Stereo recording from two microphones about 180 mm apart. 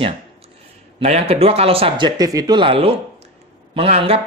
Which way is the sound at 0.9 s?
35° right (ahead or behind).